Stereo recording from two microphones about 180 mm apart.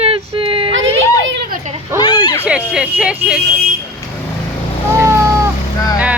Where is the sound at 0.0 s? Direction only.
30° right (ahead or behind).